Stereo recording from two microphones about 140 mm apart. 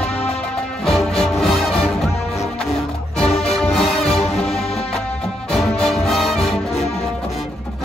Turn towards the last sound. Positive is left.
turn(degrees=0)  # may be behind; listen again after turning